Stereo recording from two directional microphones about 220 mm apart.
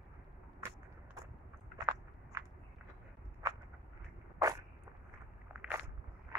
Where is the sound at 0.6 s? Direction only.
10° right (ahead or behind).